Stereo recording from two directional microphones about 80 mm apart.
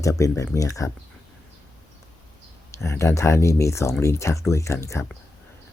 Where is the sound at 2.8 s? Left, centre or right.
Left.